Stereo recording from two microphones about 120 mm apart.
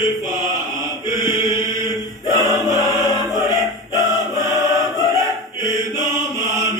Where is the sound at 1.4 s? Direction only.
25° right (ahead or behind).